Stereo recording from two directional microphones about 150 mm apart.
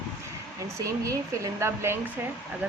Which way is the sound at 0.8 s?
20° right (ahead or behind).